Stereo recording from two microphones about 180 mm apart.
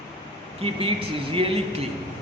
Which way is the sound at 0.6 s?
30° right (ahead or behind).